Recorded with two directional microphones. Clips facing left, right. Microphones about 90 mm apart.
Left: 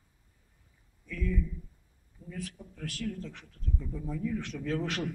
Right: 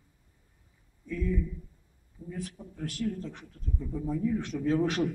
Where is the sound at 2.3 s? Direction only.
20° right (ahead or behind).